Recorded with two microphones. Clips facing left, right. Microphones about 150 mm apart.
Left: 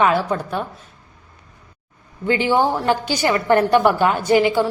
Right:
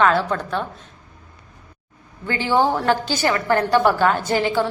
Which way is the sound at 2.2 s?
15° left (ahead or behind).